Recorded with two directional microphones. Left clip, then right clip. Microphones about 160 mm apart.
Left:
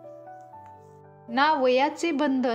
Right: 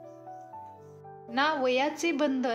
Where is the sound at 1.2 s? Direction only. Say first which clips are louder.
Left 5 dB; 35° left (ahead or behind).